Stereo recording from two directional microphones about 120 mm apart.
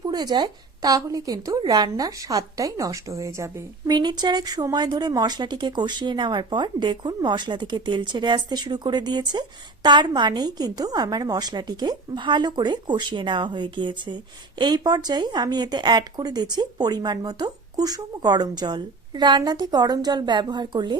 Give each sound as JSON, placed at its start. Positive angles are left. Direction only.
{"t": 0.0, "sound": "a woman's voice", "side_deg": -35}